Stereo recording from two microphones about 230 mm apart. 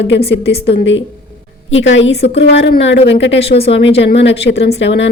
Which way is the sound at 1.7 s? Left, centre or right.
Left.